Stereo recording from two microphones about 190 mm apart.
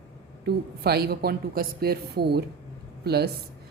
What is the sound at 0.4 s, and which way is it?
A woman's voice, 55° right (ahead or behind).